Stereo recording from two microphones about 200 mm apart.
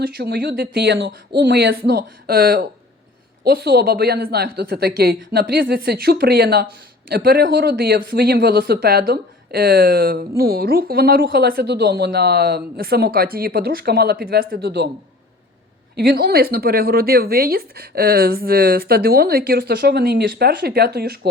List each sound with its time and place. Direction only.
0.0 s speech: 50° right (ahead or behind)
16.0 s speech: 50° right (ahead or behind)